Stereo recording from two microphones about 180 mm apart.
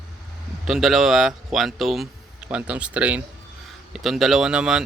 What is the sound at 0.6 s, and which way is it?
Speech, centre (ahead or behind).